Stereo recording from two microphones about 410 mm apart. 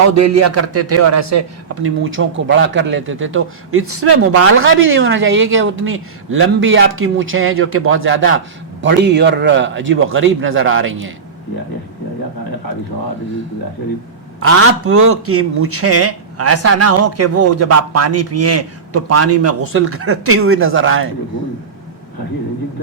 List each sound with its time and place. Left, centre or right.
0.1 s a man's voice: right
14.4 s a man's voice: right